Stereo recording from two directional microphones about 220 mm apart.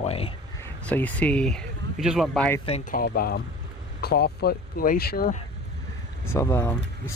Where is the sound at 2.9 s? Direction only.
40° left (ahead or behind).